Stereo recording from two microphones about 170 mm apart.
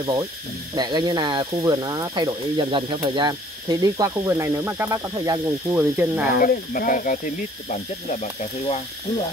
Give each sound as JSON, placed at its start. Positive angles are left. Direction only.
{"t": 0.0, "sound": "speech", "side_deg": -25}
{"t": 6.4, "sound": "speech", "side_deg": 55}